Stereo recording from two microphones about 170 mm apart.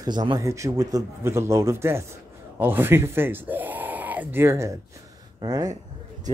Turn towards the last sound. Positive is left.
turn(degrees=-20)  # may be behind; listen again after turning